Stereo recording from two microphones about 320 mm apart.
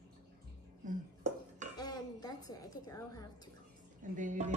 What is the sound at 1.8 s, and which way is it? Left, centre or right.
Music, centre.